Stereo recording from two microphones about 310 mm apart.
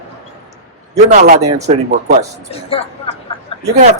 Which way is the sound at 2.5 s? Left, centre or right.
Centre.